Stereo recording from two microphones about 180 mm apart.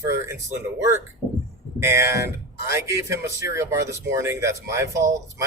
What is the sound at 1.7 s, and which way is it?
Speech, 15° right (ahead or behind).